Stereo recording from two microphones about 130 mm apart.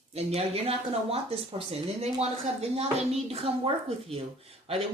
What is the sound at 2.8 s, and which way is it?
A woman's voice, 50° right (ahead or behind).